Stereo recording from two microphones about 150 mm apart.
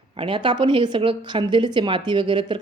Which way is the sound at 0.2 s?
35° right (ahead or behind).